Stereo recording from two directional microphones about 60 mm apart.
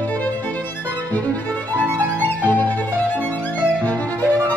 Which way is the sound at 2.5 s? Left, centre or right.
Left.